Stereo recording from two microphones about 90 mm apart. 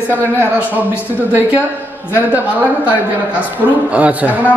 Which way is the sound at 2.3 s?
20° right (ahead or behind).